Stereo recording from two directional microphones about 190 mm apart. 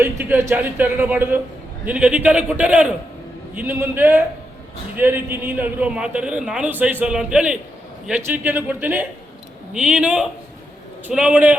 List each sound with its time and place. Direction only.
0.0 s a man's voice: 15° right (ahead or behind)